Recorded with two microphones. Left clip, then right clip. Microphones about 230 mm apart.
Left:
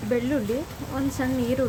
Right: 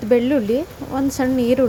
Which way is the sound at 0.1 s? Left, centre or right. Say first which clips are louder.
Right 9 dB; right.